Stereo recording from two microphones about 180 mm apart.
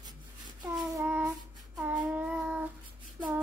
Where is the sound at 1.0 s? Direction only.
10° right (ahead or behind).